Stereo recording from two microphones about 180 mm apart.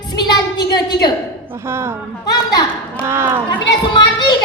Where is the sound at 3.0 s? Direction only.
15° right (ahead or behind).